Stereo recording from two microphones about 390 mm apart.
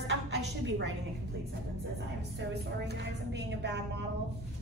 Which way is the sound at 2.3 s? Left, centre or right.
Right.